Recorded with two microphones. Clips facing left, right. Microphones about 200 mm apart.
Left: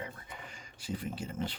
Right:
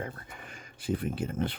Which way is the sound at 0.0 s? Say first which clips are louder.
Right 4 dB; 55° right (ahead or behind).